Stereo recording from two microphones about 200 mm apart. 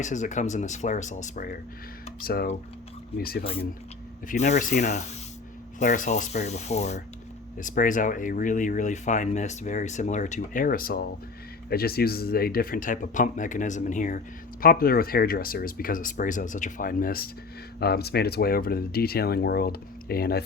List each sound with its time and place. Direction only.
0.0 s speech: 35° left (ahead or behind)
2.2 s speech: 45° left (ahead or behind)
4.3 s speech: 35° left (ahead or behind)